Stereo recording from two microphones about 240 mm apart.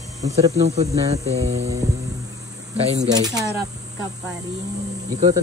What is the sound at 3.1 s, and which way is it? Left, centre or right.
Speech, centre.